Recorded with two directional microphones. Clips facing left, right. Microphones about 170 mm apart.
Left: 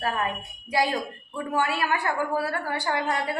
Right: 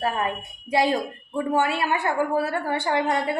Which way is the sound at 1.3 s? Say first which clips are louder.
Right 4 dB; 25° right (ahead or behind).